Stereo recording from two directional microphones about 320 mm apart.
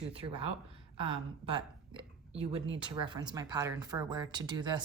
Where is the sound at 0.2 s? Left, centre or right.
Centre.